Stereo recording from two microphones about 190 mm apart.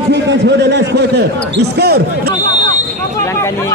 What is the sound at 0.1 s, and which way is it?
A man's voice, 65° right (ahead or behind).